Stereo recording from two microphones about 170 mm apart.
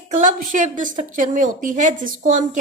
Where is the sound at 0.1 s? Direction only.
50° right (ahead or behind).